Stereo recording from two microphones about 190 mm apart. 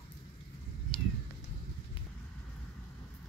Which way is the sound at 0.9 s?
30° left (ahead or behind).